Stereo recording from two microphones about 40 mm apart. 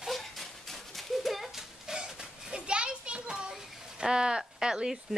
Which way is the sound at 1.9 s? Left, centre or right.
Centre.